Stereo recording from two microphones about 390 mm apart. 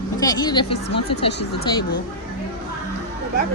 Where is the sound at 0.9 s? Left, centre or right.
Left.